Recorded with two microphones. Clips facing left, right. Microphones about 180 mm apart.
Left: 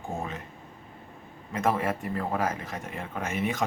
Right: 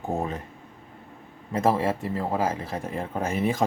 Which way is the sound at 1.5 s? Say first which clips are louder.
Right 4 dB; 30° right (ahead or behind).